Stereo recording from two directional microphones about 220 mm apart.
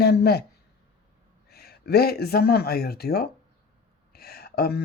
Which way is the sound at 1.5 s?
45° left (ahead or behind).